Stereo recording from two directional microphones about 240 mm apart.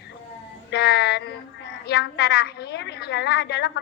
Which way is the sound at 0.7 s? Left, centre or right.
Left.